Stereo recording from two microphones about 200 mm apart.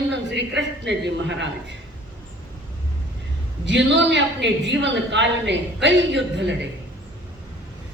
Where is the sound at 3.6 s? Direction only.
65° right (ahead or behind).